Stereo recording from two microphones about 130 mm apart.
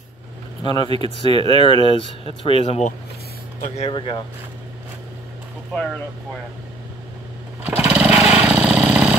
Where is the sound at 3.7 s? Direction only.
45° left (ahead or behind).